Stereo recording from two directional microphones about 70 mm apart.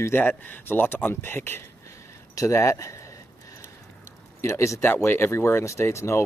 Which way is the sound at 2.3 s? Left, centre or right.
Left.